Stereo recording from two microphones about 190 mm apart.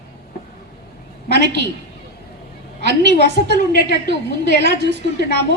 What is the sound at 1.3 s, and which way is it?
Speech, 65° right (ahead or behind).